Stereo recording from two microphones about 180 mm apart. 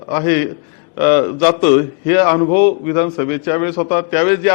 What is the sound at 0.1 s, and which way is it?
A man's voice, 15° left (ahead or behind).